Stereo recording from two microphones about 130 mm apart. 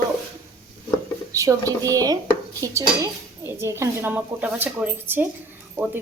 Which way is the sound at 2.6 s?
25° right (ahead or behind).